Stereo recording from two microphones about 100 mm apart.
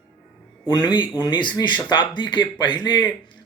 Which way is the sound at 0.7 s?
45° left (ahead or behind).